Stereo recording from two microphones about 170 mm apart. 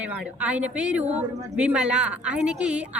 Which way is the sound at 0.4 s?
10° right (ahead or behind).